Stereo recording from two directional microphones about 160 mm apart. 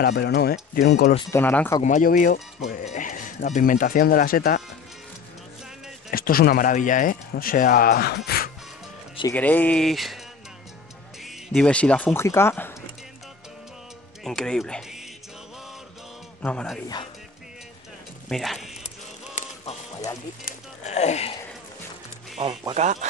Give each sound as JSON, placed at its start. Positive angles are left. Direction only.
{"t": 0.0, "sound": "speech", "side_deg": 90}
{"t": 1.3, "sound": "speech", "side_deg": 10}
{"t": 1.8, "sound": "speech", "side_deg": 50}
{"t": 6.1, "sound": "speech", "side_deg": 65}
{"t": 9.3, "sound": "speech", "side_deg": 10}
{"t": 11.2, "sound": "speech", "side_deg": 0}
{"t": 14.2, "sound": "speech", "side_deg": 5}
{"t": 16.4, "sound": "speech", "side_deg": 5}
{"t": 18.3, "sound": "a sound", "side_deg": 0}
{"t": 20.5, "sound": "a sound", "side_deg": 60}
{"t": 20.8, "sound": "a sound", "side_deg": 45}
{"t": 22.4, "sound": "speech", "side_deg": -30}